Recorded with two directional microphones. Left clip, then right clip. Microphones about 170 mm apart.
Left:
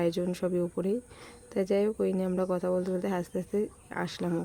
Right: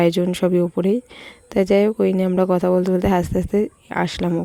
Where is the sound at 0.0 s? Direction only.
55° right (ahead or behind).